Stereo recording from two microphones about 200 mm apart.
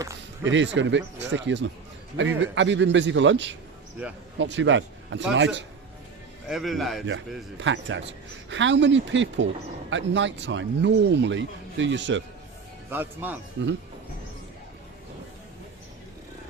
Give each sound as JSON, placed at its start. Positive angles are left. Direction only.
{"t": 0.0, "sound": "a sound", "side_deg": -15}
{"t": 0.5, "sound": "speech", "side_deg": -65}
{"t": 6.5, "sound": "a man's voice", "side_deg": 0}
{"t": 7.6, "sound": "speech", "side_deg": -65}
{"t": 12.9, "sound": "speech", "side_deg": -10}